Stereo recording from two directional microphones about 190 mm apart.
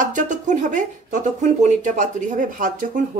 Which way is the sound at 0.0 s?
40° right (ahead or behind).